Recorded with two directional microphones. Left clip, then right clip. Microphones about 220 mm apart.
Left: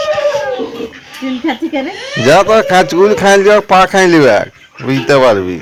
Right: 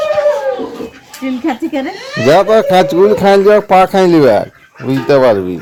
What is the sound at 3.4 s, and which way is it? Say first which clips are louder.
A man's voice: even; centre (ahead or behind).